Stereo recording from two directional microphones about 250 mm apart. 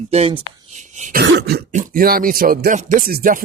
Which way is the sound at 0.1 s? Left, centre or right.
Right.